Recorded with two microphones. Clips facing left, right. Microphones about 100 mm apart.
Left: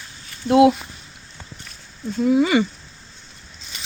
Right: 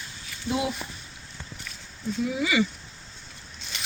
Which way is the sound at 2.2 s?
50° left (ahead or behind).